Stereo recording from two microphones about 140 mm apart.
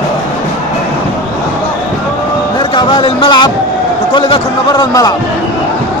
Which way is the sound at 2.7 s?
35° left (ahead or behind).